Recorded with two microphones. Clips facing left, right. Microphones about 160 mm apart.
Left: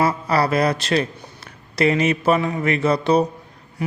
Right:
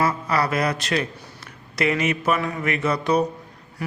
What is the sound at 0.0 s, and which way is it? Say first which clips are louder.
A man's voice: left 3 dB; 30° left (ahead or behind).